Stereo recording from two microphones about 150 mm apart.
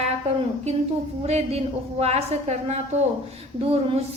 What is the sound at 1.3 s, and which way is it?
A woman's voice, 45° right (ahead or behind).